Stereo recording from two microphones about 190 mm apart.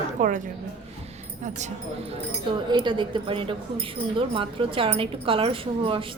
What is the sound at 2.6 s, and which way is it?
A woman's voice, 25° right (ahead or behind).